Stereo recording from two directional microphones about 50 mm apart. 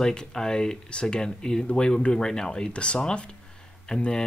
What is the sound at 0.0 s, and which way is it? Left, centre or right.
Speech, centre.